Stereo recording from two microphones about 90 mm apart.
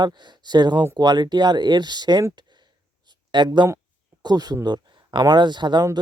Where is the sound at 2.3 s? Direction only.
55° right (ahead or behind).